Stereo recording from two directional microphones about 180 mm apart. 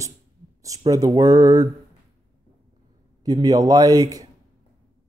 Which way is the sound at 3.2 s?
20° right (ahead or behind).